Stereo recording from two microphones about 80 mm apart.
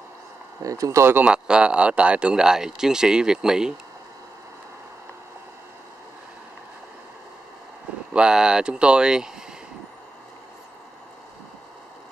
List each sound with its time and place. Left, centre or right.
0.6 s speech: right
1.2 s speech: centre
8.1 s speech: centre